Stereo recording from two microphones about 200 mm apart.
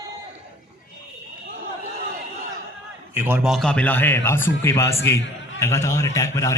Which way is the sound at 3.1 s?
10° right (ahead or behind).